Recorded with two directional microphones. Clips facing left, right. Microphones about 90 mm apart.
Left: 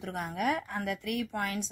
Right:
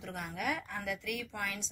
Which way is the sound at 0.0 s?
45° left (ahead or behind).